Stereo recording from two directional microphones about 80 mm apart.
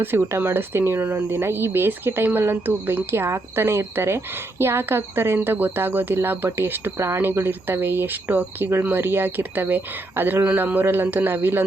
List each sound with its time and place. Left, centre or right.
0.0 s speech: right